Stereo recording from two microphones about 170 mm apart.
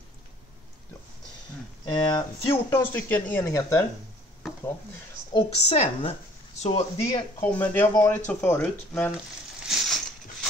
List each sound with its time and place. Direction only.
1.9 s speech: 25° left (ahead or behind)
2.7 s speech: 10° left (ahead or behind)
5.3 s a woman's voice: 35° left (ahead or behind)
7.3 s speech: 10° left (ahead or behind)
9.7 s a sound: centre (ahead or behind)